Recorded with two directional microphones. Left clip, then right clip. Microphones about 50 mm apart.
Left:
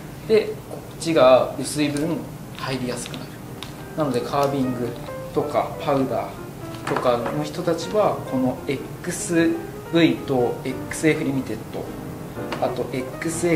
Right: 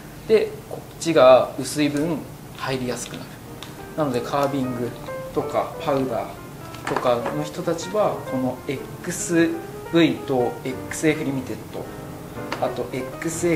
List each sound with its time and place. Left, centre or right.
0.3 s speech: centre
4.0 s speech: centre
12.4 s speech: centre